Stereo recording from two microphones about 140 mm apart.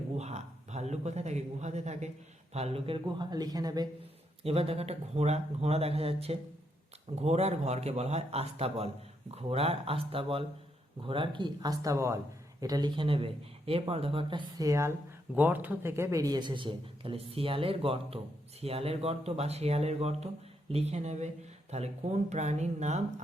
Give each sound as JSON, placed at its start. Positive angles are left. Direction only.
{"t": 0.2, "sound": "speech", "side_deg": -50}
{"t": 4.4, "sound": "speech", "side_deg": -45}